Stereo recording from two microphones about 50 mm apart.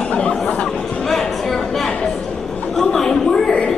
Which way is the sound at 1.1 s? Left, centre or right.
Centre.